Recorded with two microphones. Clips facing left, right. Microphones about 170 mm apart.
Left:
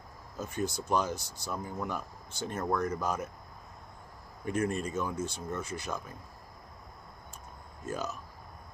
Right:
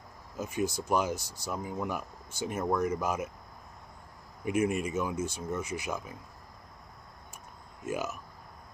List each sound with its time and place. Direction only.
0.4 s speech: 10° right (ahead or behind)
1.1 s speech: 20° left (ahead or behind)
1.5 s speech: 10° right (ahead or behind)
4.5 s speech: 10° right (ahead or behind)
7.8 s speech: 10° right (ahead or behind)